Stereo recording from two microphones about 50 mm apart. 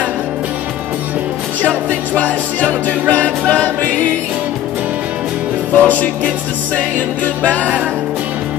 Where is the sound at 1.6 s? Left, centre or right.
Left.